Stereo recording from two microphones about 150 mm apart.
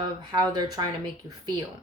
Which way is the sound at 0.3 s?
30° right (ahead or behind).